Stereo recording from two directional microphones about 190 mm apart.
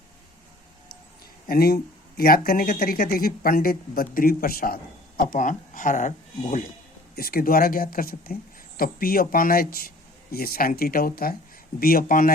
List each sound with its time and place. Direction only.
1.5 s speech: 55° left (ahead or behind)
7.2 s speech: 50° left (ahead or behind)